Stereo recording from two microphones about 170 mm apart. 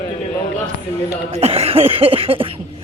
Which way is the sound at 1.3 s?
35° right (ahead or behind).